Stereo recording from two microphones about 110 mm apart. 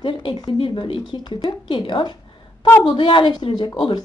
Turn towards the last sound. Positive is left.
turn(degrees=45)  # may be behind; listen again after turning